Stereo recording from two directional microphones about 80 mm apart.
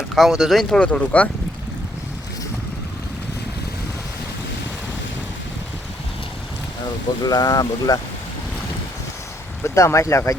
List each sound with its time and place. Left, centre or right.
0.2 s speech: centre
0.8 s speech: centre
7.2 s speech: left
9.6 s speech: left